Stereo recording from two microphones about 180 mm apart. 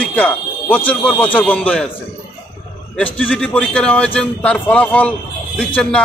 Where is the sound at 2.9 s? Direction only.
10° left (ahead or behind).